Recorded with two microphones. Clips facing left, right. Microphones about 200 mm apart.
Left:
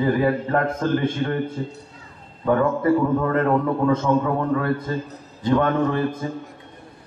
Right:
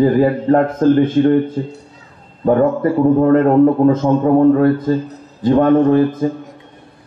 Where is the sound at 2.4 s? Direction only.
45° right (ahead or behind).